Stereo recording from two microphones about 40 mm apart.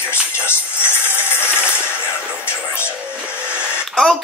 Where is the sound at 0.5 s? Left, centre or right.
Left.